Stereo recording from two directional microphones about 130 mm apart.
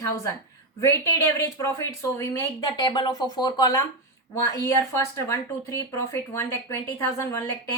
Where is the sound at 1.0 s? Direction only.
25° left (ahead or behind).